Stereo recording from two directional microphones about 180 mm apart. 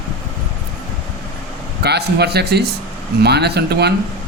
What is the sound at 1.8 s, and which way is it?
A man's voice, 65° right (ahead or behind).